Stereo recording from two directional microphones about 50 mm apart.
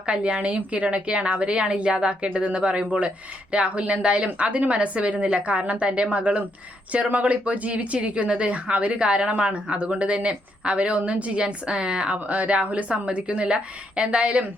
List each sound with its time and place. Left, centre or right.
0.0 s speech: right